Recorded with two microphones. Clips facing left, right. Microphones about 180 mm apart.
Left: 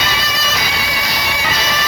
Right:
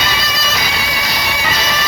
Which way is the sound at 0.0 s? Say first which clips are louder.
Right 1 dB; 70° right (ahead or behind).